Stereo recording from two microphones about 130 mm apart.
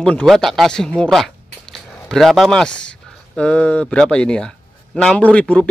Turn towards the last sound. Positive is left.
turn(degrees=10)  # may be behind; listen again after turning